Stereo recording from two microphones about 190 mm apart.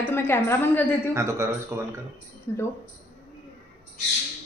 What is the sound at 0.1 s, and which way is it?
A woman's voice, 10° left (ahead or behind).